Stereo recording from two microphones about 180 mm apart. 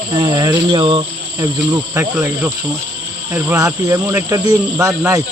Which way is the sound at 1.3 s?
15° right (ahead or behind).